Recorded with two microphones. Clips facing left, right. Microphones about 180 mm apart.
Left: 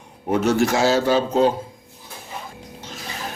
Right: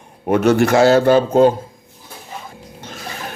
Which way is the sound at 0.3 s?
60° right (ahead or behind).